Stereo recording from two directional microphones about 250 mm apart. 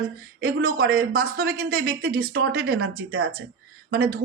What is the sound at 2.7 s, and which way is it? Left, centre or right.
Speech, right.